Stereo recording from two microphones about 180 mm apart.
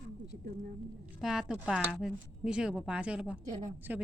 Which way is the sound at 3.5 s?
40° right (ahead or behind).